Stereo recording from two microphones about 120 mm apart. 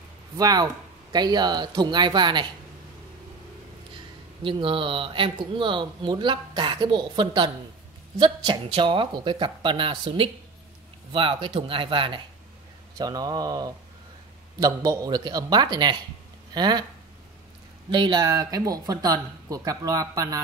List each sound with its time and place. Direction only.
0.4 s speech: 30° right (ahead or behind)
4.4 s speech: 45° right (ahead or behind)
12.9 s speech: 35° right (ahead or behind)
17.9 s speech: 40° right (ahead or behind)